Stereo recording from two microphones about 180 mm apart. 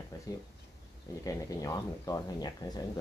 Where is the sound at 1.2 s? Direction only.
20° left (ahead or behind).